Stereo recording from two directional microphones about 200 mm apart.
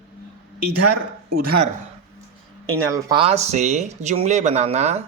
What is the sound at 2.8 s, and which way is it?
Speech, 15° right (ahead or behind).